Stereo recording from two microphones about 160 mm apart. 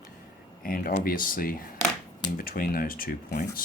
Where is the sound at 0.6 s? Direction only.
65° left (ahead or behind).